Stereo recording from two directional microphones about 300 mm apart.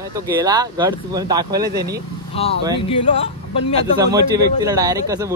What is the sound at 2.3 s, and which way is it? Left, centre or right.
Speech, centre.